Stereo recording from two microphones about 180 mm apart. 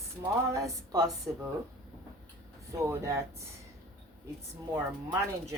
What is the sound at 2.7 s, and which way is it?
Speech, 15° right (ahead or behind).